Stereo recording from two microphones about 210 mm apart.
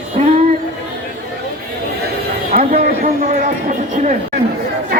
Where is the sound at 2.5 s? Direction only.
35° right (ahead or behind).